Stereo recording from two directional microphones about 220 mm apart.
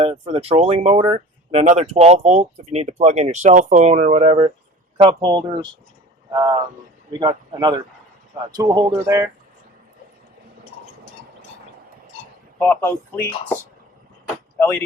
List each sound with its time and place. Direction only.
0.0 s speech: 25° right (ahead or behind)
12.5 s speech: 10° left (ahead or behind)